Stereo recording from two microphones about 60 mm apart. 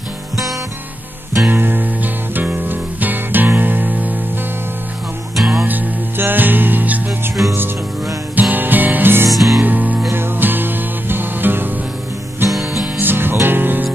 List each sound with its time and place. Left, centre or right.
1.5 s music: right
5.3 s music: centre
5.7 s music: right
8.4 s music: right
9.3 s music: centre
9.6 s music: right
12.4 s music: right